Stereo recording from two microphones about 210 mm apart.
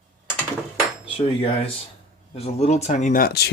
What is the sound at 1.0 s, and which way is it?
Cutlery, 25° left (ahead or behind).